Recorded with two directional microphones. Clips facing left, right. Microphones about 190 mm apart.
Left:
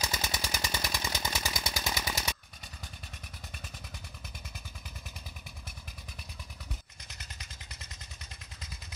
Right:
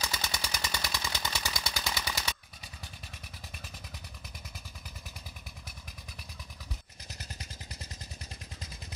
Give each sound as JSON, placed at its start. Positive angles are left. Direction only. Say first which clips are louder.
{"t": 0.0, "sound": "gunshot", "louder": "left 1 dB", "side_deg": 20}
{"t": 1.0, "sound": "a sound", "louder": "left 1 dB", "side_deg": 20}
{"t": 7.1, "sound": "vehicle", "louder": "right 5 dB", "side_deg": -40}